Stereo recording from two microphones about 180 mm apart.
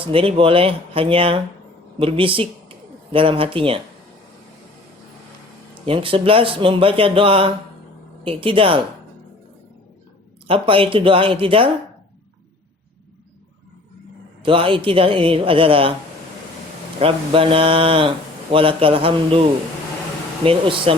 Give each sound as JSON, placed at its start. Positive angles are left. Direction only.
{"t": 0.1, "sound": "speech", "side_deg": -30}
{"t": 5.8, "sound": "speech", "side_deg": -30}
{"t": 10.4, "sound": "speech", "side_deg": -30}
{"t": 14.4, "sound": "speech", "side_deg": -30}
{"t": 17.0, "sound": "speech", "side_deg": -30}